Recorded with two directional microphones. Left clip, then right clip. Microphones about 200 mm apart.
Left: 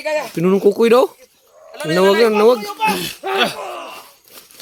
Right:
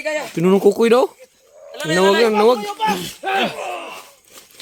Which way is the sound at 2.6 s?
50° left (ahead or behind).